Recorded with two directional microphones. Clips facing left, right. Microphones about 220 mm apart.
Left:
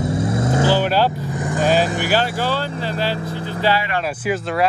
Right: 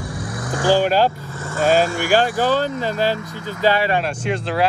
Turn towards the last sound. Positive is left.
turn(degrees=0)  # may be behind; listen again after turning